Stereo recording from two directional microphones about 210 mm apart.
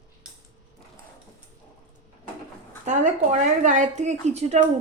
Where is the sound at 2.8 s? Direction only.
35° right (ahead or behind).